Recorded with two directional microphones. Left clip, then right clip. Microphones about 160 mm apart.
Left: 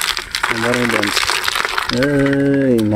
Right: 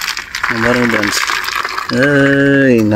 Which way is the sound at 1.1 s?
50° left (ahead or behind).